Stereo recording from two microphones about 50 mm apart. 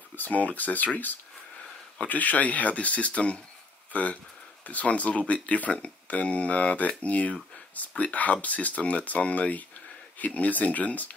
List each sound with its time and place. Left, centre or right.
0.1 s speech: left